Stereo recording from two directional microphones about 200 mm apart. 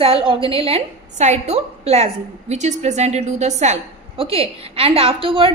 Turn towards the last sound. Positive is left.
turn(degrees=-25)  # may be behind; listen again after turning